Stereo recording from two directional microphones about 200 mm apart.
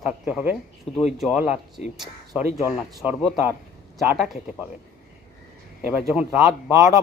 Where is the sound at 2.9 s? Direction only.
20° right (ahead or behind).